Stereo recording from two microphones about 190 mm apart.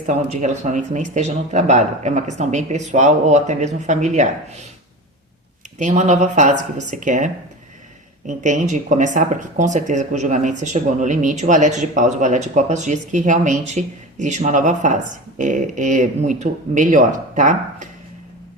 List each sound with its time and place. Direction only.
0.0 s speech: 40° right (ahead or behind)
5.8 s speech: 40° right (ahead or behind)
8.3 s speech: 40° right (ahead or behind)